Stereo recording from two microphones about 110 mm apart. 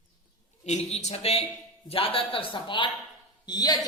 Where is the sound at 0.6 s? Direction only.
85° left; by 1.5 s 70° left (ahead or behind).